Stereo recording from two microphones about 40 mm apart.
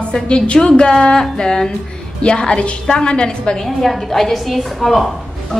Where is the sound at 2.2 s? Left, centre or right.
Left.